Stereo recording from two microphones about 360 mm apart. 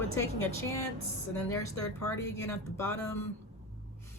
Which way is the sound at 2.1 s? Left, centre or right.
Centre.